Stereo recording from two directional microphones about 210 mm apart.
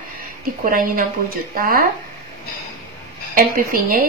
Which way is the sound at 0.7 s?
40° right (ahead or behind).